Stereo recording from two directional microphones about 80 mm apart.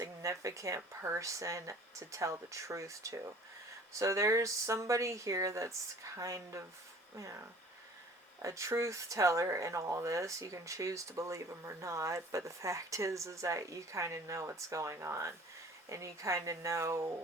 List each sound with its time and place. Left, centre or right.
0.0 s speech: right